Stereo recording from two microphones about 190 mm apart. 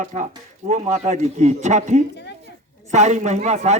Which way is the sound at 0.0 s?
40° right (ahead or behind).